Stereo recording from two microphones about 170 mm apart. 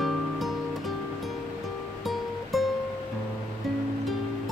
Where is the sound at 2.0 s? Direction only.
Centre (ahead or behind).